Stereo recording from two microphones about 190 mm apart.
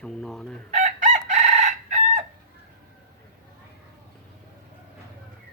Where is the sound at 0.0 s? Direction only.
5° left (ahead or behind).